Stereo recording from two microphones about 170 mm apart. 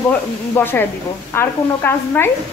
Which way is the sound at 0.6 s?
10° left (ahead or behind).